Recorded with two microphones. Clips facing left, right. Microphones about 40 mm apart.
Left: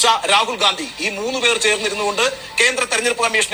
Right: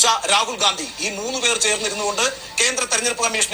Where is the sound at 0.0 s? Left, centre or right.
Left.